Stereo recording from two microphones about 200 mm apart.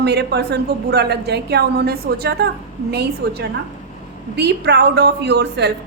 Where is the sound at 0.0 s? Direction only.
55° right (ahead or behind).